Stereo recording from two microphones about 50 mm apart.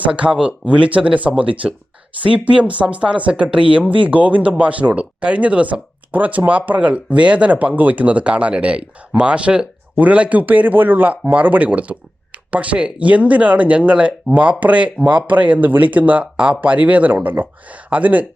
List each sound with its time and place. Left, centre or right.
0.1 s speech: right